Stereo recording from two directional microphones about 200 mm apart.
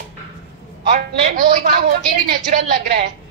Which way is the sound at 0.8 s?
45° right (ahead or behind).